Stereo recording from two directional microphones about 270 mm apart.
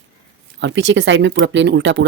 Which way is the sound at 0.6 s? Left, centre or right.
Right.